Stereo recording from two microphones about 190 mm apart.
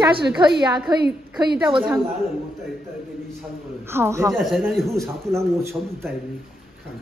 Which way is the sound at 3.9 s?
15° right (ahead or behind).